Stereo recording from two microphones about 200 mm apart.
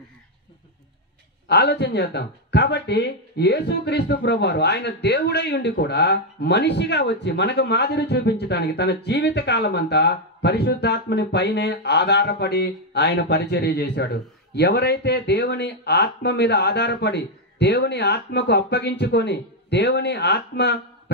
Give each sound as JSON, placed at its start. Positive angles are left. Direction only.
{"t": 1.5, "sound": "speech", "side_deg": 55}